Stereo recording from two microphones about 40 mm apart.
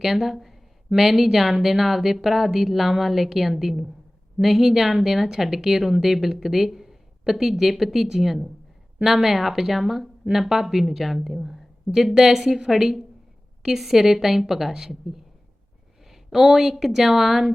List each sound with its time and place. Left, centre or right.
0.0 s a woman's voice: centre
16.0 s a sound: centre
16.7 s a woman's voice: centre